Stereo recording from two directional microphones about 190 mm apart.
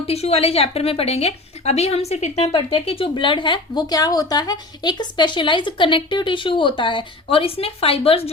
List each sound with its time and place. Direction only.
0.1 s a woman's voice: 30° left (ahead or behind)